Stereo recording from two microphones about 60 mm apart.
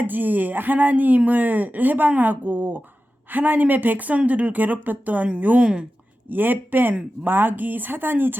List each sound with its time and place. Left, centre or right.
0.0 s speech: right